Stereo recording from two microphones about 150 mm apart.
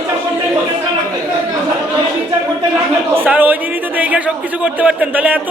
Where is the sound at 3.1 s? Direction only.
10° right (ahead or behind).